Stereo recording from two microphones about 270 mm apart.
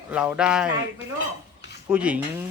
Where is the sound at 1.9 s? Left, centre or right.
Centre.